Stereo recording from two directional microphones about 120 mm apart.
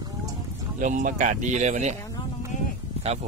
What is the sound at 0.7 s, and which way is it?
Speech, 90° right.